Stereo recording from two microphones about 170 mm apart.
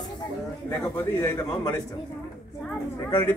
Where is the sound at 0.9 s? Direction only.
15° left (ahead or behind).